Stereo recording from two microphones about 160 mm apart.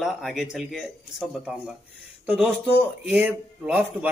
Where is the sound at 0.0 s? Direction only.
Centre (ahead or behind).